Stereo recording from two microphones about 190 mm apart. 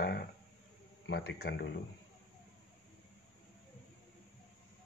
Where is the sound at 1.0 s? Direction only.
65° left (ahead or behind).